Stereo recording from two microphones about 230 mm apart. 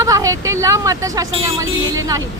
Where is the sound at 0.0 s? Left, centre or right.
Centre.